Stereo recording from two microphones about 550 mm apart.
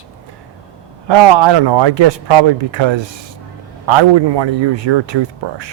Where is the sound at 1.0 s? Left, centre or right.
Right.